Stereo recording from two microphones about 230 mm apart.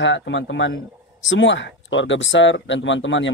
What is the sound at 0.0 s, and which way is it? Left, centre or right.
Speech, left.